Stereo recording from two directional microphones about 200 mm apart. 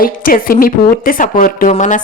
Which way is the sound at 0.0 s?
45° left (ahead or behind).